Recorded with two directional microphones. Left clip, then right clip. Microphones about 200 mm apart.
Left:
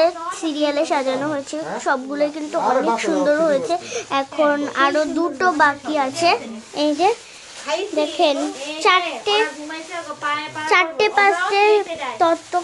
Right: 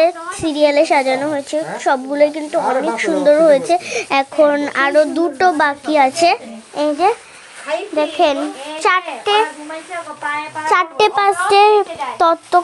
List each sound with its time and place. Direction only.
0.0 s a woman's voice: 15° right (ahead or behind)
6.8 s a woman's voice: centre (ahead or behind)
10.7 s a child's voice: 20° right (ahead or behind)